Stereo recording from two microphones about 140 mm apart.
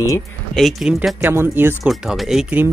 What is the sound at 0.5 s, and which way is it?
Speech, centre (ahead or behind).